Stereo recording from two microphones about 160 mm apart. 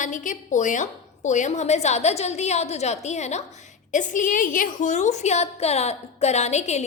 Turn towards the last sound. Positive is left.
turn(degrees=45)  # may be behind; listen again after turning